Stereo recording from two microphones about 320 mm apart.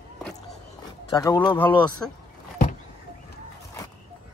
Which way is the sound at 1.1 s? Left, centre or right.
Centre.